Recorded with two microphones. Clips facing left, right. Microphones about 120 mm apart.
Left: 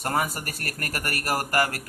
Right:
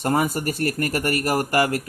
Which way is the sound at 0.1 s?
25° right (ahead or behind).